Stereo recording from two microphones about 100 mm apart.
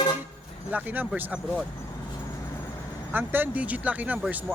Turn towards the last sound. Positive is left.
turn(degrees=-15)  # may be behind; listen again after turning